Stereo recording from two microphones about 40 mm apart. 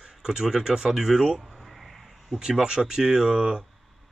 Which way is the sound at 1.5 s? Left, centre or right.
Centre.